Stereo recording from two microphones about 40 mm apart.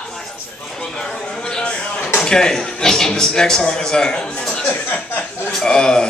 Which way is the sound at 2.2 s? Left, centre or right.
Centre.